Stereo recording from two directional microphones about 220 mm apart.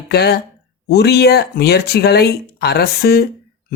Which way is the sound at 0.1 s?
45° left (ahead or behind).